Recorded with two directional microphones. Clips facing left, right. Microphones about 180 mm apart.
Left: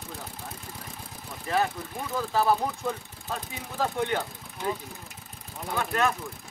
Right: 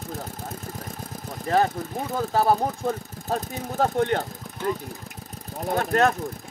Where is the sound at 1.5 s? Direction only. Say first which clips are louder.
Right 5 dB; 40° right (ahead or behind).